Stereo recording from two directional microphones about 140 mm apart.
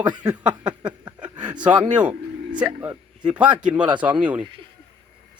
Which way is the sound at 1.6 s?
10° right (ahead or behind).